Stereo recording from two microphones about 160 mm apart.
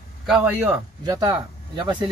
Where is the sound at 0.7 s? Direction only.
25° right (ahead or behind).